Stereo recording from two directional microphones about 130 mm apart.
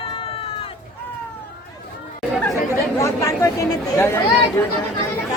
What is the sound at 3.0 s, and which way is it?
Chatter, 25° left (ahead or behind).